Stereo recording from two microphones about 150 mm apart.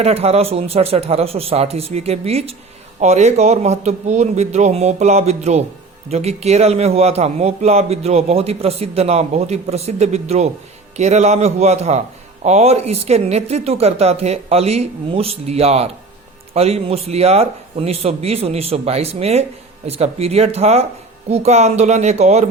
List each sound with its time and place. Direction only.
0.0 s a man's voice: 45° right (ahead or behind)